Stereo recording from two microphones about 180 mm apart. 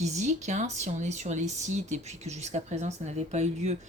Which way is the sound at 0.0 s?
40° right (ahead or behind).